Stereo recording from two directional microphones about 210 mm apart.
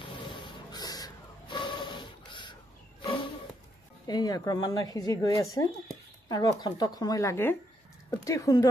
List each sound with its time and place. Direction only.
0.0 s a sound: 25° left (ahead or behind)
3.0 s wild animals: 20° left (ahead or behind)
4.1 s speech: 20° left (ahead or behind)